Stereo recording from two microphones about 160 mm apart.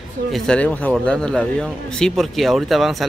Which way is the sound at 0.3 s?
5° left (ahead or behind).